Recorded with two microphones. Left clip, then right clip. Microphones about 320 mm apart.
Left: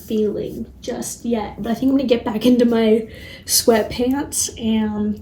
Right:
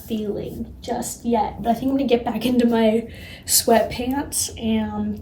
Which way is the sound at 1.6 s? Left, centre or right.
Centre.